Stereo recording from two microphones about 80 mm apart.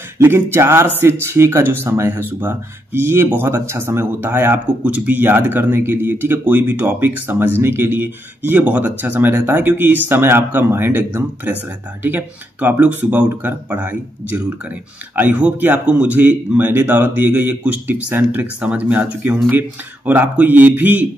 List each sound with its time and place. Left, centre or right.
0.2 s speech: right